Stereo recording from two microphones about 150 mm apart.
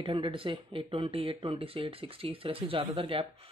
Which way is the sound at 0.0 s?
35° right (ahead or behind).